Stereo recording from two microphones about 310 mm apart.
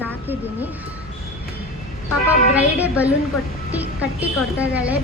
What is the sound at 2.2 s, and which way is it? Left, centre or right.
A woman's voice, centre.